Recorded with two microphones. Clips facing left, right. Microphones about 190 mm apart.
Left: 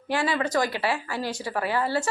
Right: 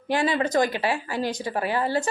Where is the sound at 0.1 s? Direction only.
20° right (ahead or behind).